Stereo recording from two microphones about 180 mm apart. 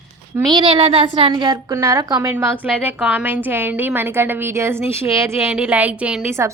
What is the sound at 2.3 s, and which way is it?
A woman's voice, 10° right (ahead or behind).